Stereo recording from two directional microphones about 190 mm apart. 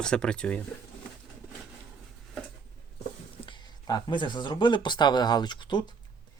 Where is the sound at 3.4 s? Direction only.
25° left (ahead or behind).